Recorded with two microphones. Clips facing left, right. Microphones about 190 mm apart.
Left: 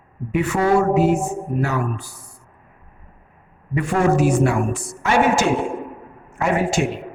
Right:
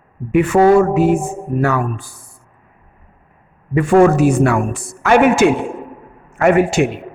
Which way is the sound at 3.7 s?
50° right (ahead or behind).